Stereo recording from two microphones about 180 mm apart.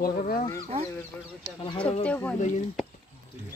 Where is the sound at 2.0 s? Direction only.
10° left (ahead or behind).